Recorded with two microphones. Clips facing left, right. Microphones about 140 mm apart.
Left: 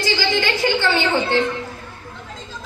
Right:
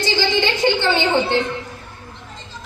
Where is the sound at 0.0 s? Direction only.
20° right (ahead or behind).